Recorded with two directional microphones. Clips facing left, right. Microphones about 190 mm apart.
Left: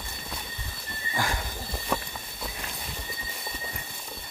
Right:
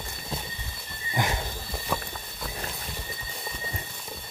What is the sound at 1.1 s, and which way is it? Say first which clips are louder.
Horse: right 2 dB; 20° right (ahead or behind).